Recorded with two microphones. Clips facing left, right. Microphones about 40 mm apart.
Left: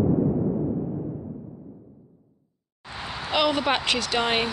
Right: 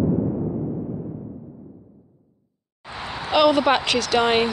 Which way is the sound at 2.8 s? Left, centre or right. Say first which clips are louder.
Right 3 dB; centre.